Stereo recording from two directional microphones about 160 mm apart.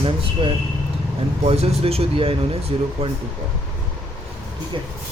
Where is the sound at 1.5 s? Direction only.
40° right (ahead or behind).